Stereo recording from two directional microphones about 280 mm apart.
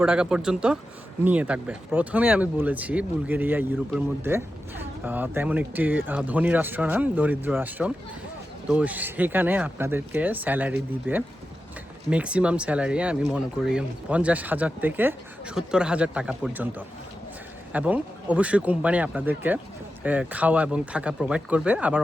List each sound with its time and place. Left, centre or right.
0.0 s speech: centre